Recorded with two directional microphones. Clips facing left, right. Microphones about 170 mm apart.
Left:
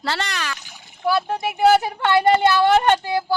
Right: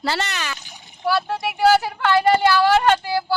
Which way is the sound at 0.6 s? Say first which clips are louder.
Right 1 dB; 20° right (ahead or behind).